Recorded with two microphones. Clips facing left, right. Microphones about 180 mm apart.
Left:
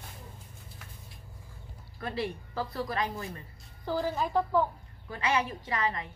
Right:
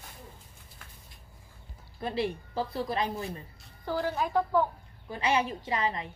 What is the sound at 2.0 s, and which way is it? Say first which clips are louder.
A woman's voice: right 3 dB; 25° right (ahead or behind).